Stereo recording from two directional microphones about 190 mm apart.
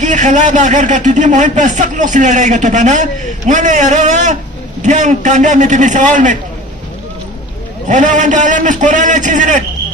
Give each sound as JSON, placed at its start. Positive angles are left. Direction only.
{"t": 0.0, "sound": "speech", "side_deg": -40}
{"t": 7.9, "sound": "speech", "side_deg": -40}